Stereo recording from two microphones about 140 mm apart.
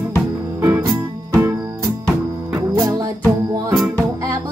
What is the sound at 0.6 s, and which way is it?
Music, 20° right (ahead or behind).